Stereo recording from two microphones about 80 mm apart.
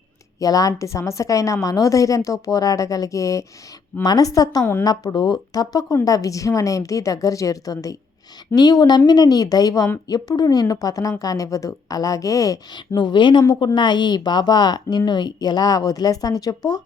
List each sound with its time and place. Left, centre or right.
0.3 s a woman's voice: left
12.7 s a woman's voice: left